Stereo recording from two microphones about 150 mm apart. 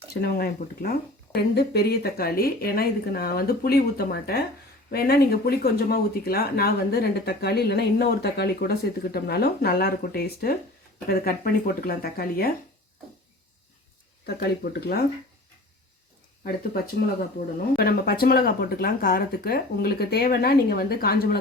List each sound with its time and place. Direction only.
0.1 s speech: 90° left
14.3 s speech: 90° left
16.4 s speech: 80° left